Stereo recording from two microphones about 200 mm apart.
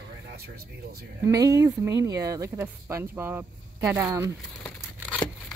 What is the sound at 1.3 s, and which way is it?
Speech, 15° right (ahead or behind).